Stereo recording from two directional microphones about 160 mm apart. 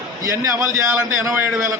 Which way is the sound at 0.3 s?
20° right (ahead or behind).